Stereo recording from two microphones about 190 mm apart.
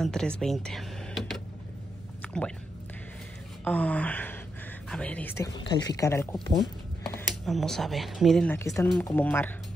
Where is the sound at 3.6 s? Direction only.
10° left (ahead or behind).